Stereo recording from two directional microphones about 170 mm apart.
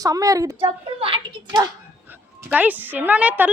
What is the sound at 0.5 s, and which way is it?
A child's voice, 30° right (ahead or behind).